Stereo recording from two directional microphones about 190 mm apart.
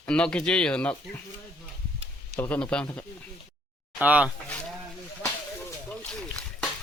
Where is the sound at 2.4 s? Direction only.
10° left (ahead or behind).